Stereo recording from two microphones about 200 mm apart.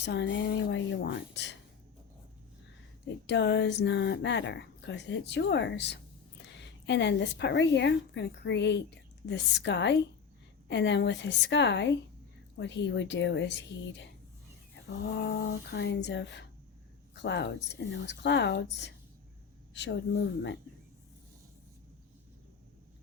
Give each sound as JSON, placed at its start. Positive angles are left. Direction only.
{"t": 0.0, "sound": "speech", "side_deg": 60}
{"t": 3.2, "sound": "speech", "side_deg": 60}
{"t": 15.3, "sound": "speech", "side_deg": 55}